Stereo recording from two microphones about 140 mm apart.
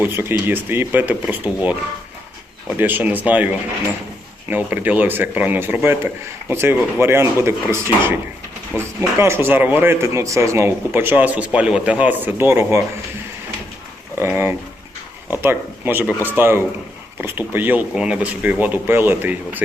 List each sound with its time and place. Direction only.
0.0 s speech: 15° right (ahead or behind)
2.7 s speech: 15° right (ahead or behind)
14.2 s speech: 15° right (ahead or behind)